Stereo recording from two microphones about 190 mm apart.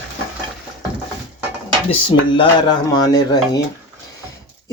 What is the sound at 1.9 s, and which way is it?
Speech, 25° left (ahead or behind).